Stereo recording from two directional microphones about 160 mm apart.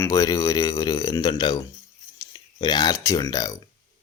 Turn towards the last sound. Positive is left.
turn(degrees=20)  # may be behind; listen again after turning